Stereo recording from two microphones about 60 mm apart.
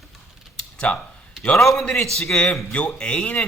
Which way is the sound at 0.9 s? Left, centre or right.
Left.